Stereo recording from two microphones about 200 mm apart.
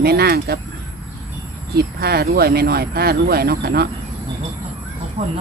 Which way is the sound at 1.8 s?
50° right (ahead or behind).